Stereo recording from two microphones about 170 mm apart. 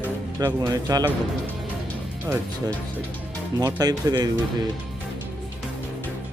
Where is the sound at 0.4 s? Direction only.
20° right (ahead or behind).